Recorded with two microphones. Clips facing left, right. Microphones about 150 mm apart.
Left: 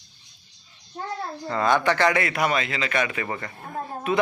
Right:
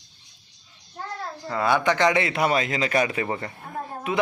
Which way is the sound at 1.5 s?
10° right (ahead or behind).